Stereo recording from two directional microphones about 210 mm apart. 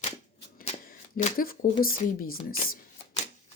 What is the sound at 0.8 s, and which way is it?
Speech, 40° left (ahead or behind).